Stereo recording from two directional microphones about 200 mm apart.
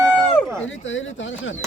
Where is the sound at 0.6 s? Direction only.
70° left (ahead or behind).